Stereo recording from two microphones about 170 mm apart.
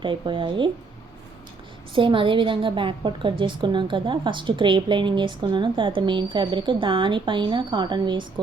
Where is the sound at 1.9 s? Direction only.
30° right (ahead or behind).